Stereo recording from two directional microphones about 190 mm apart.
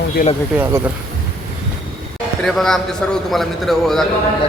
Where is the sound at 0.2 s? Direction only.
45° left (ahead or behind).